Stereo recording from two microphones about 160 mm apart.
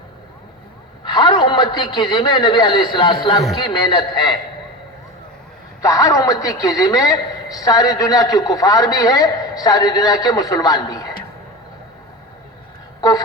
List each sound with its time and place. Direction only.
1.0 s a man's voice: 25° left (ahead or behind)
5.8 s a man's voice: 20° left (ahead or behind)
13.0 s speech: 25° left (ahead or behind)